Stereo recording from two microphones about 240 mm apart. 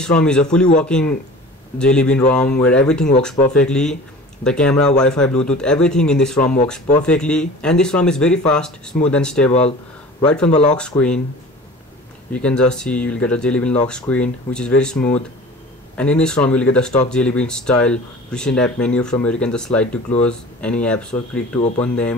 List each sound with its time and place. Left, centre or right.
0.0 s speech: centre
9.5 s speech: left
10.8 s speech: centre
12.3 s speech: centre